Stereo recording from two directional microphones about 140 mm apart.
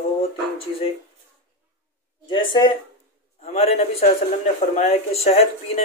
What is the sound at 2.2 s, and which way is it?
Speech, 35° left (ahead or behind).